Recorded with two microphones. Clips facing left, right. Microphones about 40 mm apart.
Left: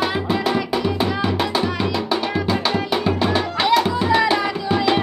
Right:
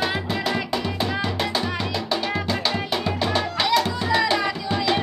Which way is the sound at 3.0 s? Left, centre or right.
Centre.